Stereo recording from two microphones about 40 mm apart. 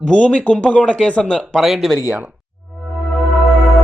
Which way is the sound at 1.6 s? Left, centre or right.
Centre.